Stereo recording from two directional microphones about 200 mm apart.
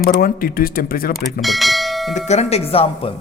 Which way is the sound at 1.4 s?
Centre (ahead or behind).